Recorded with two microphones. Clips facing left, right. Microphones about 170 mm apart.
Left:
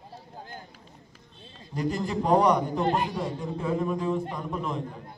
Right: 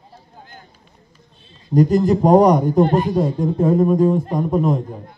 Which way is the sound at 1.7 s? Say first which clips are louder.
Right 14 dB; 40° right (ahead or behind).